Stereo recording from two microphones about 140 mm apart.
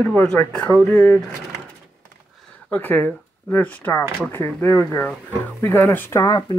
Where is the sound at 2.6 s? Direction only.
10° left (ahead or behind).